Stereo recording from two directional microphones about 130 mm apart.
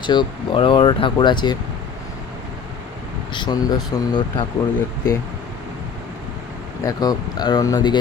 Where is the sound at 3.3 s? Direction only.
35° left (ahead or behind).